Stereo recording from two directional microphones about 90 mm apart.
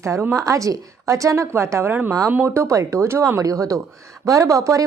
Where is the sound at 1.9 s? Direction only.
20° right (ahead or behind); by 4.8 s 40° right (ahead or behind).